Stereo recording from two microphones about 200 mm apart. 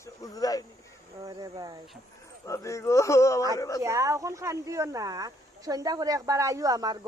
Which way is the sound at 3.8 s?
15° right (ahead or behind).